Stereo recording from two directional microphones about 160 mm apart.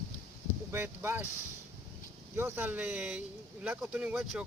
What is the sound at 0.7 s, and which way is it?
Speech, 15° right (ahead or behind).